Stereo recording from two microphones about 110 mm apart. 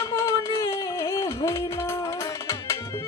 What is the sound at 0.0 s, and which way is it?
Music, 30° left (ahead or behind).